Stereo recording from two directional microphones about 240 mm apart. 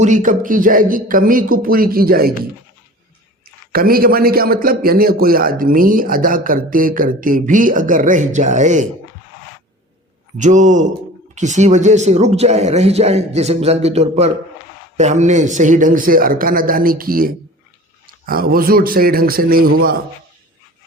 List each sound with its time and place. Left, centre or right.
0.0 s a man's voice: right
3.7 s a man's voice: right
10.3 s a man's voice: right